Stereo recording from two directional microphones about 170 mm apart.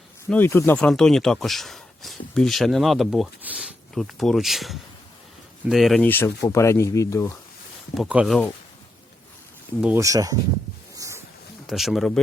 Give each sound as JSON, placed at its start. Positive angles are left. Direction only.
{"t": 0.3, "sound": "speech", "side_deg": 10}
{"t": 7.9, "sound": "speech", "side_deg": -5}
{"t": 9.8, "sound": "speech", "side_deg": -15}
{"t": 10.9, "sound": "a sound", "side_deg": -20}
{"t": 11.6, "sound": "speech", "side_deg": 0}